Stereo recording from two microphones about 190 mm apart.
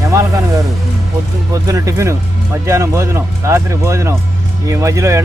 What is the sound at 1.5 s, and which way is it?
Speech, 15° right (ahead or behind).